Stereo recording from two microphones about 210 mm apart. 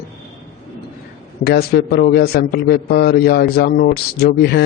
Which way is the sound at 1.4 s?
50° left (ahead or behind).